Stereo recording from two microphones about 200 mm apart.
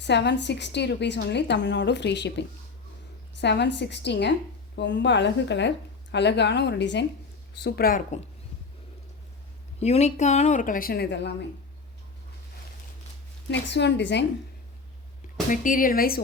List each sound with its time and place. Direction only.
0.0 s a woman's voice: 60° left (ahead or behind)
3.4 s a woman's voice: 60° left (ahead or behind)
9.8 s a woman's voice: 35° left (ahead or behind); by 11.3 s 55° left (ahead or behind)
13.5 s a woman's voice: 60° left (ahead or behind)
15.4 s speech: 40° left (ahead or behind)